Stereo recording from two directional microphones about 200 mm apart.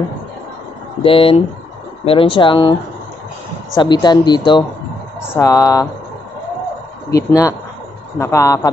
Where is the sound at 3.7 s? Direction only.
20° left (ahead or behind).